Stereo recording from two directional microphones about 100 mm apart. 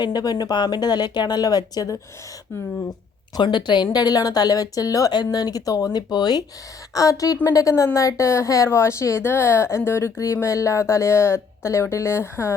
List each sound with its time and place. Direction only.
0.0 s speech: 45° left (ahead or behind)
3.3 s speech: 50° left (ahead or behind); by 12.5 s 25° left (ahead or behind)